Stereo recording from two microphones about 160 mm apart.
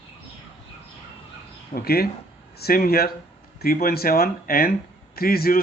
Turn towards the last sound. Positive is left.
turn(degrees=65)  # may be behind; listen again after turning